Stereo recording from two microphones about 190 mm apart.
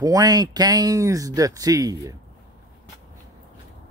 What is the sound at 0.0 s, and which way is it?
Speech, 20° right (ahead or behind).